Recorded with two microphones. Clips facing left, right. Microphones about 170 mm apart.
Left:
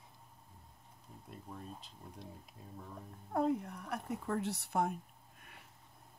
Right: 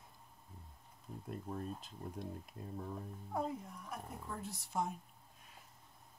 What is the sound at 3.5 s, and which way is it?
Speech, 70° left (ahead or behind).